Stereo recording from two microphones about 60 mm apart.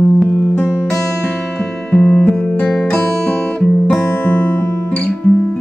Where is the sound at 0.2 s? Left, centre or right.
Left.